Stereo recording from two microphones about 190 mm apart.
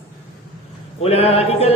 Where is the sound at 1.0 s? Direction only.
30° left (ahead or behind).